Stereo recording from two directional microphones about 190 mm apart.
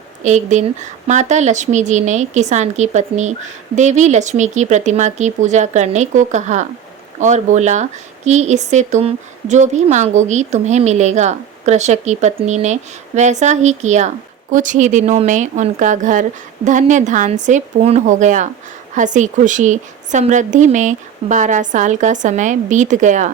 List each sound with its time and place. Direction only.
0.2 s speech: 40° right (ahead or behind)